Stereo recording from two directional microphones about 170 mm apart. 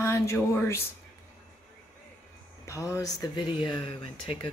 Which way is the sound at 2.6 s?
20° left (ahead or behind).